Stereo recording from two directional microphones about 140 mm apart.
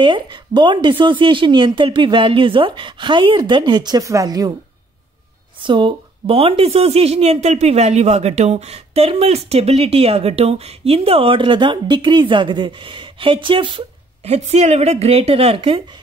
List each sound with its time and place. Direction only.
0.0 s a woman's voice: 35° right (ahead or behind)
5.6 s speech: 35° right (ahead or behind)